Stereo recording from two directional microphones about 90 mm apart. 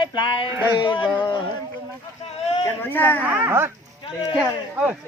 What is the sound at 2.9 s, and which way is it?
Speech, 20° left (ahead or behind).